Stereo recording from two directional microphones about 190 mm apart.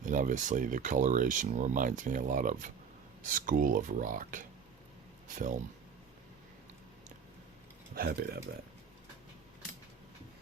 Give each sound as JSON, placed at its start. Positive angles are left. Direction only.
{"t": 0.0, "sound": "speech", "side_deg": -45}
{"t": 7.9, "sound": "speech", "side_deg": -55}